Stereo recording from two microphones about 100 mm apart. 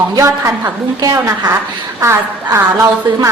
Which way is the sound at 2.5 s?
30° right (ahead or behind).